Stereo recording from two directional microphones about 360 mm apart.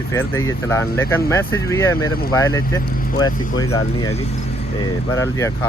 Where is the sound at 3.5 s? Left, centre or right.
Left.